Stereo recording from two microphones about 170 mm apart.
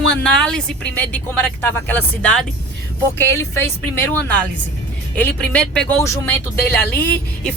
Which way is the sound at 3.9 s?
10° left (ahead or behind).